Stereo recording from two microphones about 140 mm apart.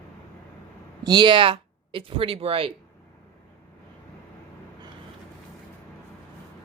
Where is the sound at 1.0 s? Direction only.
30° right (ahead or behind).